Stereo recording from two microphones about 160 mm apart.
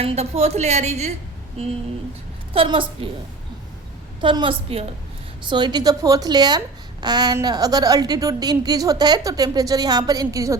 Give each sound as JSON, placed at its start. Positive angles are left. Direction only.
{"t": 0.0, "sound": "a woman's voice", "side_deg": -40}
{"t": 2.5, "sound": "a woman's voice", "side_deg": -30}
{"t": 4.2, "sound": "a woman's voice", "side_deg": -30}